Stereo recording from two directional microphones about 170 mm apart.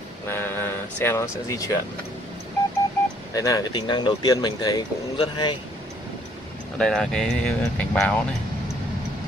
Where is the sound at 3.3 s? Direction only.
20° left (ahead or behind).